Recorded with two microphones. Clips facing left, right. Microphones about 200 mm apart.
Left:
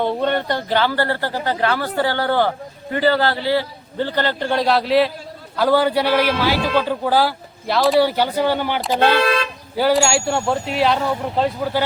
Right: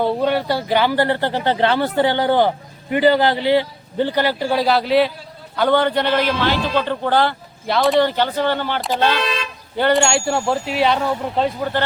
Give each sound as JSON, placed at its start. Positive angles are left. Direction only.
{"t": 0.0, "sound": "a man's voice", "side_deg": -5}